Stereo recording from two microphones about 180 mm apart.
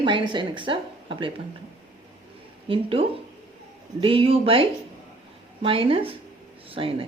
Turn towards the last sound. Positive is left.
turn(degrees=-30)  # may be behind; listen again after turning